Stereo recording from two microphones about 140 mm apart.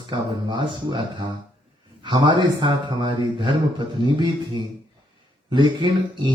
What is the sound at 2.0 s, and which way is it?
Speech, 35° right (ahead or behind).